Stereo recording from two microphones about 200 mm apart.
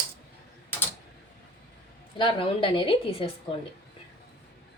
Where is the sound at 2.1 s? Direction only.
25° left (ahead or behind).